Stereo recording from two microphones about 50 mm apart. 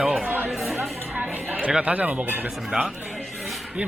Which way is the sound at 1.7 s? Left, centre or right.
Centre.